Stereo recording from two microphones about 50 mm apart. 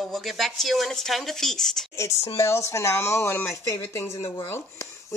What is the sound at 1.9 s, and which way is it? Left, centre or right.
A woman's voice, left.